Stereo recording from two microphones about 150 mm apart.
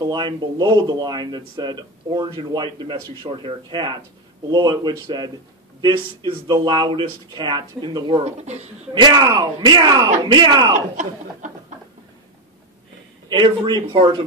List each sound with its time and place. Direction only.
0.0 s speech: 30° right (ahead or behind)
8.4 s a man's voice: 45° right (ahead or behind)
9.0 s speech: 30° right (ahead or behind)
13.3 s speech: 30° right (ahead or behind)